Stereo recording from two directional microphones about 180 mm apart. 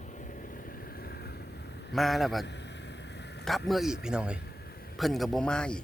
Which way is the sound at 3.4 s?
Centre (ahead or behind).